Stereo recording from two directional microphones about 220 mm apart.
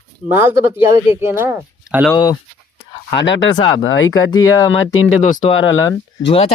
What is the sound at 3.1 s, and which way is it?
Speech, 55° left (ahead or behind).